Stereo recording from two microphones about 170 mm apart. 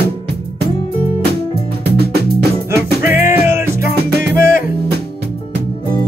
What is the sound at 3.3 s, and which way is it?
Music, 15° right (ahead or behind).